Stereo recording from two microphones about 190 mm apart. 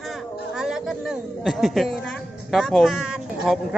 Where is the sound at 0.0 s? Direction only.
Centre (ahead or behind).